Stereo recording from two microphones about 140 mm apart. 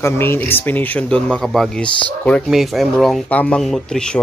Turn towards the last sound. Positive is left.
turn(degrees=5)  # may be behind; listen again after turning